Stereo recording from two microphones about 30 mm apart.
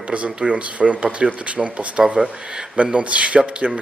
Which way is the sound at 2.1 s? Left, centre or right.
Right.